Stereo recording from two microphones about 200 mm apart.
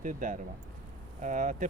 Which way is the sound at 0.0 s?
40° right (ahead or behind).